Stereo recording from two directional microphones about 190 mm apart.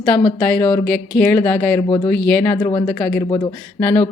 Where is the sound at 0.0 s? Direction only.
20° left (ahead or behind).